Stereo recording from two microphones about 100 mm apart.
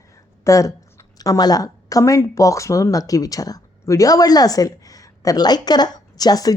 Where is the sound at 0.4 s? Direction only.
35° left (ahead or behind).